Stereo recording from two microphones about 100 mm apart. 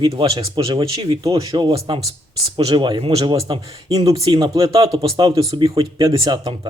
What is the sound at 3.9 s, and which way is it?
Speech, 35° right (ahead or behind).